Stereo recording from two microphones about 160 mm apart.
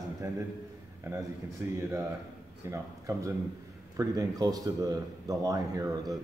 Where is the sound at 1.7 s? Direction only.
15° right (ahead or behind).